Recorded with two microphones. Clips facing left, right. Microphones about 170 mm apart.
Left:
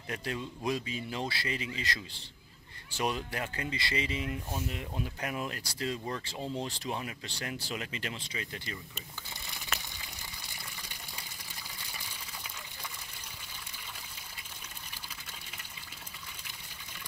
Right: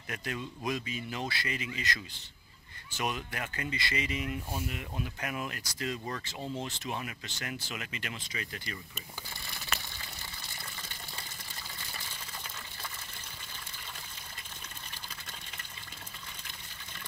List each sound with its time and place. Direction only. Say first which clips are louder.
0.1 s speech: left 1 dB; 30° left (ahead or behind)
6.4 s speech: left 1 dB; 5° right (ahead or behind)
7.0 s speech: left 1 dB; 30° left (ahead or behind)
9.5 s a sound: even; 15° left (ahead or behind)
10.5 s water: right 1 dB; 15° left (ahead or behind)